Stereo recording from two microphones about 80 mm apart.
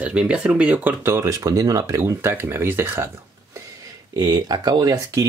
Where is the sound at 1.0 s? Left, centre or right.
Right.